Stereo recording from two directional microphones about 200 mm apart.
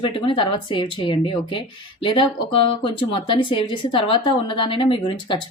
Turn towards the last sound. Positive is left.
turn(degrees=25)  # may be behind; listen again after turning